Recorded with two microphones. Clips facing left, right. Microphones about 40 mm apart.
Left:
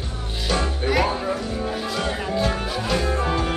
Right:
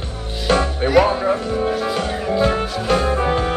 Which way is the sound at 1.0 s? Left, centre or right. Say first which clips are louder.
Right 6 dB; right.